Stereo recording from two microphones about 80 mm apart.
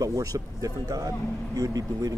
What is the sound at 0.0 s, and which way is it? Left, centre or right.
Speech, right.